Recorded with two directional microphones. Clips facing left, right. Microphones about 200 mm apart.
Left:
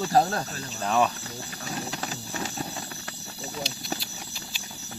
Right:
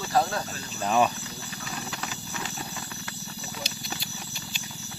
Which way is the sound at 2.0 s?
40° left (ahead or behind).